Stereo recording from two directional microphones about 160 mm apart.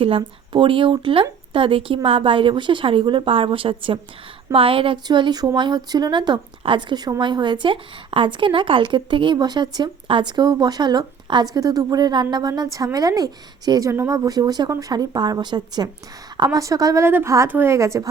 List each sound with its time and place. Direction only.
0.0 s a woman's voice: 35° right (ahead or behind)